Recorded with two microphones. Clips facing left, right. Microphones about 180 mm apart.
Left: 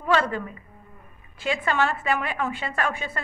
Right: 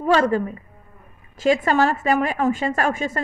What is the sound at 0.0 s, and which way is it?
Speech, 40° right (ahead or behind).